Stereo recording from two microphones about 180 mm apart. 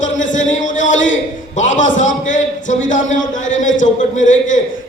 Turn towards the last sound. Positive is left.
turn(degrees=45)  # may be behind; listen again after turning